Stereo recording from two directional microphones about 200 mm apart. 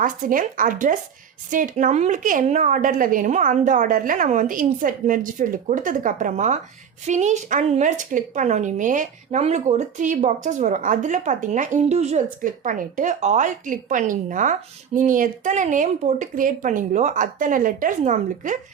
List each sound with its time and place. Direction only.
0.0 s speech: 45° right (ahead or behind)